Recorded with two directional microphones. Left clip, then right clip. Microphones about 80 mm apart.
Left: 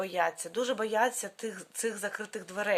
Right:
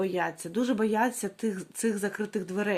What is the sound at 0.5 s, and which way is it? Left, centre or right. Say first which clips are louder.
Speech: right 4 dB; left.